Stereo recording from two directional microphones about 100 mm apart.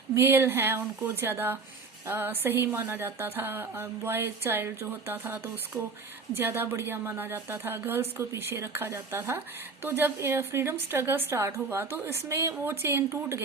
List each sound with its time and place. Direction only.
0.1 s speech: 25° right (ahead or behind)